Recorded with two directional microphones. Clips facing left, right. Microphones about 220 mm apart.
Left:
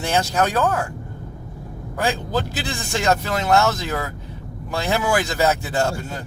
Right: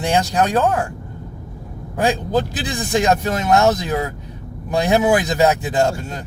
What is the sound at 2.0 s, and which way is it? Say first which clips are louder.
Speech: right 5 dB; 20° right (ahead or behind).